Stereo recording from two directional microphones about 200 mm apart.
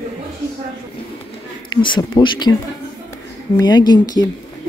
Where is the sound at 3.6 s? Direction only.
20° left (ahead or behind).